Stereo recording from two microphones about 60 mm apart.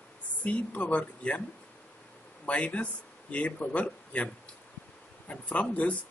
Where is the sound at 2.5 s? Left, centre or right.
Left.